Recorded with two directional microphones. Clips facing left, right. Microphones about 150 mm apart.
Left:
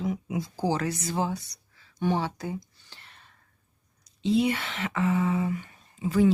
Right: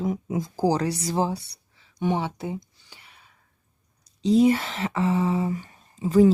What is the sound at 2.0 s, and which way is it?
Speech, 20° right (ahead or behind).